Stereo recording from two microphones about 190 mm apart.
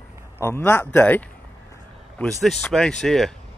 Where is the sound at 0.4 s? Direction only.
15° left (ahead or behind).